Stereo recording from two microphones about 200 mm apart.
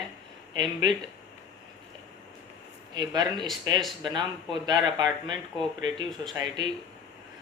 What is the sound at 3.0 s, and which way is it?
Speech, 20° right (ahead or behind).